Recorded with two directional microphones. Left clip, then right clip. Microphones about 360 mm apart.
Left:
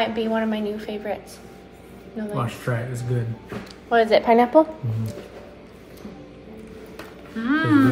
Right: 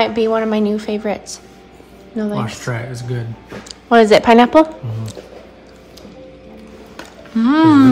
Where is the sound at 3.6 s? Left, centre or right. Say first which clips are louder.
Right 8 dB; right.